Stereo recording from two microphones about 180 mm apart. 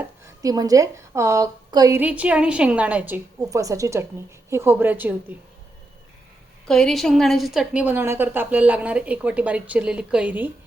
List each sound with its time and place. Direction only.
0.4 s a woman's voice: 20° right (ahead or behind)
2.0 s a woman's voice: 10° right (ahead or behind)
6.7 s a woman's voice: centre (ahead or behind)